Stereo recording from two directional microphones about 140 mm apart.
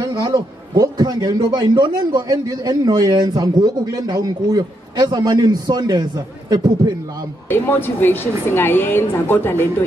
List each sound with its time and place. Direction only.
0.0 s a man's voice: 30° right (ahead or behind)
7.4 s a woman's voice: 15° left (ahead or behind)